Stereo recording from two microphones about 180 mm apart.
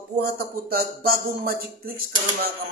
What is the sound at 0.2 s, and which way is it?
A man's voice, 60° right (ahead or behind).